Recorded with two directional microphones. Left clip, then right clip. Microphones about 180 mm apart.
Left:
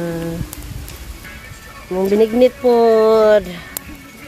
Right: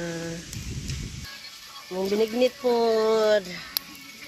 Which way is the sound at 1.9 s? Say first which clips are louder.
Left 10 dB; 5° right (ahead or behind).